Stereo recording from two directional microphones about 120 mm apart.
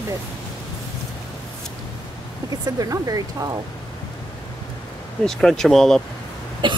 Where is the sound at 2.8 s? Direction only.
30° right (ahead or behind).